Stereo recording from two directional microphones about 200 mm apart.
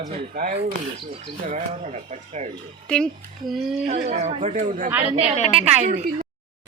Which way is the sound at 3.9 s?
35° right (ahead or behind).